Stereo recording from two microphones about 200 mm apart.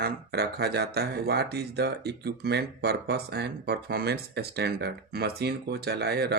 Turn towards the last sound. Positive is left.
turn(degrees=-55)  # may be behind; listen again after turning